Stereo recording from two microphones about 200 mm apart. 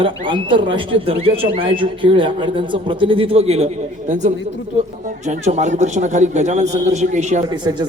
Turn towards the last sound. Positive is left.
turn(degrees=-20)  # may be behind; listen again after turning